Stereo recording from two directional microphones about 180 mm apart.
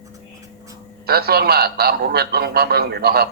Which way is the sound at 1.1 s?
60° right (ahead or behind).